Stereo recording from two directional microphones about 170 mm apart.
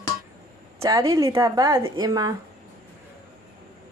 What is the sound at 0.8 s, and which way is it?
Speech, 20° right (ahead or behind).